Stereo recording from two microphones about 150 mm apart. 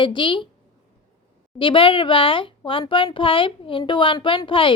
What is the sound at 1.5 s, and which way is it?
Speech, 35° left (ahead or behind).